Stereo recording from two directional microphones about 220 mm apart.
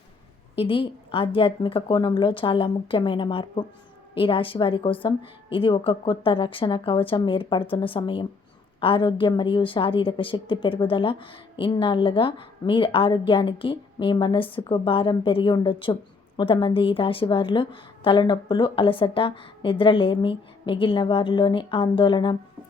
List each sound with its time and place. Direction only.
0.6 s a woman's voice: 25° left (ahead or behind)